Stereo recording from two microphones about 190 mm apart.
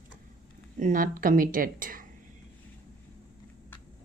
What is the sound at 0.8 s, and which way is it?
Speech, 45° right (ahead or behind).